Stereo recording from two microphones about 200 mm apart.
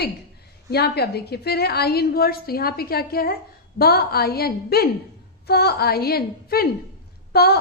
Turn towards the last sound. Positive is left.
turn(degrees=50)  # may be behind; listen again after turning